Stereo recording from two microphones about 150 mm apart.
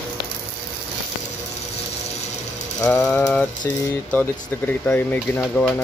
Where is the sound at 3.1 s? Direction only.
10° left (ahead or behind).